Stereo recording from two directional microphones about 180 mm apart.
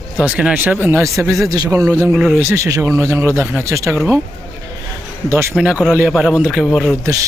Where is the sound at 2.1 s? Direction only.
5° right (ahead or behind).